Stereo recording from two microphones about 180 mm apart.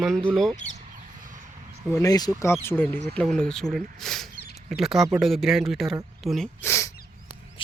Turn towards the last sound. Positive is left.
turn(degrees=15)  # may be behind; listen again after turning